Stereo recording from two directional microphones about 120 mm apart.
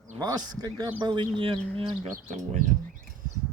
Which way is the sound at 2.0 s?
90° right.